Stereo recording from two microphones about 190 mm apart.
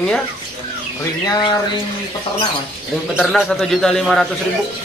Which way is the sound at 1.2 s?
20° left (ahead or behind).